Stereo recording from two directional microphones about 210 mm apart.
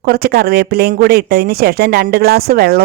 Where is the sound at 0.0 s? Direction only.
50° right (ahead or behind).